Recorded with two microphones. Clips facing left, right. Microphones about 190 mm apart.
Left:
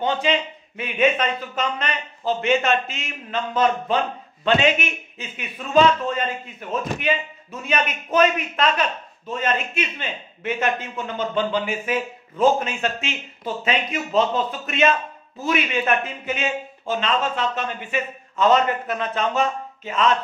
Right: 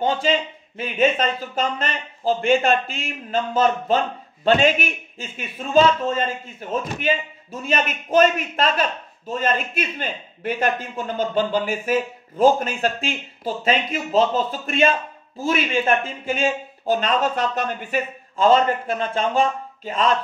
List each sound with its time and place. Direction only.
0.0 s a man's voice: 35° right (ahead or behind)